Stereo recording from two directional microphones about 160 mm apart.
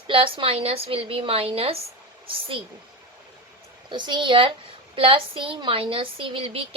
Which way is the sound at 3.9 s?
30° right (ahead or behind).